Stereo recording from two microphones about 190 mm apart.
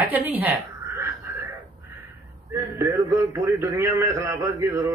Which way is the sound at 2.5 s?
15° right (ahead or behind).